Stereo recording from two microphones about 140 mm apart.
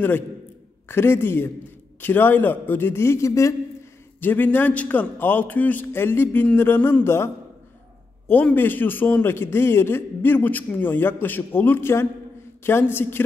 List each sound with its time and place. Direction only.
0.8 s a man's voice: 15° left (ahead or behind)
8.3 s a man's voice: 10° left (ahead or behind)